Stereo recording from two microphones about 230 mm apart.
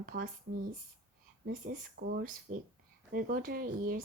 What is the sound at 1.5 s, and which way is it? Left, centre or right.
Speech, right.